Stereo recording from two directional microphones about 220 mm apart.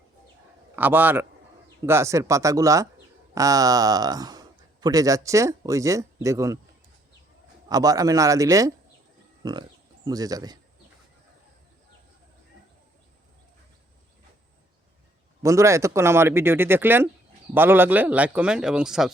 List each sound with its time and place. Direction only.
0.8 s speech: 10° right (ahead or behind)
7.7 s speech: 15° right (ahead or behind)
15.4 s speech: 15° right (ahead or behind)